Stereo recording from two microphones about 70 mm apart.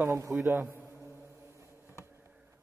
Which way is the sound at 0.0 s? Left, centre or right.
Right.